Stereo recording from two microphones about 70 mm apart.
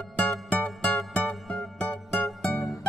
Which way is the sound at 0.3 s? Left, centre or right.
Centre.